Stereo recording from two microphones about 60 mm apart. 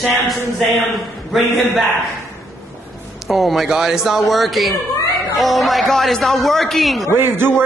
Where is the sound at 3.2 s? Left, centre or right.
Centre.